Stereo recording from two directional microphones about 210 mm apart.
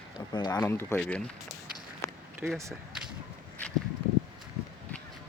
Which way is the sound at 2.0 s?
15° left (ahead or behind).